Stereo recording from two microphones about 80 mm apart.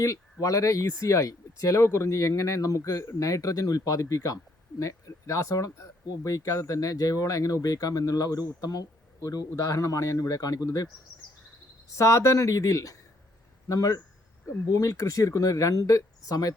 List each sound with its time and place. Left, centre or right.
0.0 s speech: left
11.9 s speech: left